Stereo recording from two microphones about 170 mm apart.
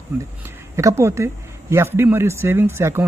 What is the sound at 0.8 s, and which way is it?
Speech, 15° right (ahead or behind).